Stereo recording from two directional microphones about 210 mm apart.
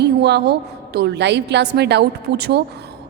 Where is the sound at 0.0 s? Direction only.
55° right (ahead or behind).